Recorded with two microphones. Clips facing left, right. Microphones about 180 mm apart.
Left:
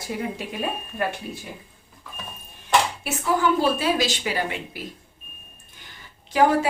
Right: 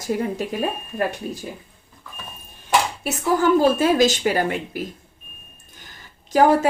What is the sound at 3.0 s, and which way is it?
Speech, 45° right (ahead or behind).